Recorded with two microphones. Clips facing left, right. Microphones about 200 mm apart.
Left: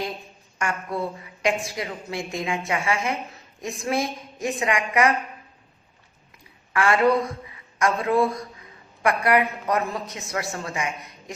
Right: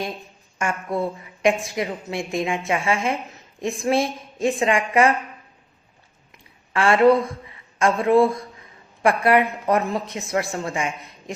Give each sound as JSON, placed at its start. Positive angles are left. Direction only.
{"t": 0.6, "sound": "a woman's voice", "side_deg": -25}
{"t": 6.7, "sound": "a woman's voice", "side_deg": -25}